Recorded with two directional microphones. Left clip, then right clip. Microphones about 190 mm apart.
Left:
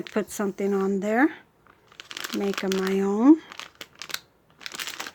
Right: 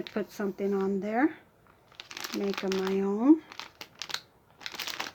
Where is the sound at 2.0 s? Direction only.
20° left (ahead or behind).